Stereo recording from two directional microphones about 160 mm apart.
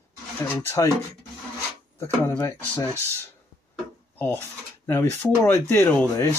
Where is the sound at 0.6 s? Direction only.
20° left (ahead or behind).